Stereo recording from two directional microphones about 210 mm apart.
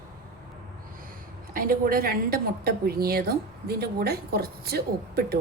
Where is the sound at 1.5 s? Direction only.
45° right (ahead or behind).